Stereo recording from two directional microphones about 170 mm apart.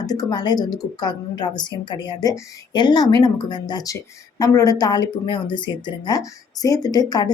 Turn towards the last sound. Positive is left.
turn(degrees=25)  # may be behind; listen again after turning